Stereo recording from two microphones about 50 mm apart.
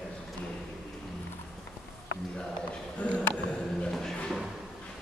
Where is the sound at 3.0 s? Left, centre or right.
Left.